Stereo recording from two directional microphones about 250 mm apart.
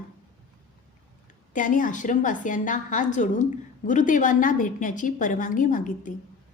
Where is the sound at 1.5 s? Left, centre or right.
Left.